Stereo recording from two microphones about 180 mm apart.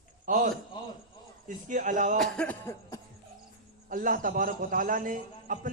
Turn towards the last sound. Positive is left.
turn(degrees=-45)  # may be behind; listen again after turning